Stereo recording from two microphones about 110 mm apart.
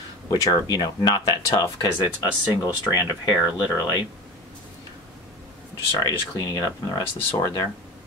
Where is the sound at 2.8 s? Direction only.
35° left (ahead or behind).